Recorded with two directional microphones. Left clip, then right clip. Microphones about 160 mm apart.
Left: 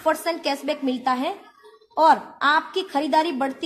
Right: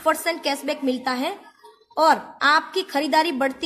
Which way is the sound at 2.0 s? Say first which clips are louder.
Even; 15° right (ahead or behind).